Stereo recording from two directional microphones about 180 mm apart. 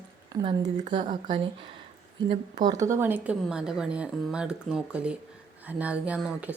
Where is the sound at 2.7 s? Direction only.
15° right (ahead or behind).